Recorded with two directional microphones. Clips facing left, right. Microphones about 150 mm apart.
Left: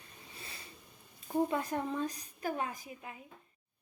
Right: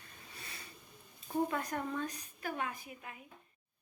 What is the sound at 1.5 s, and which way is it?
A woman's voice, 25° left (ahead or behind).